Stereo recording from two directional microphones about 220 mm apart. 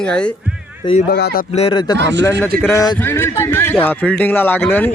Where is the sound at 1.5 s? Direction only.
25° left (ahead or behind).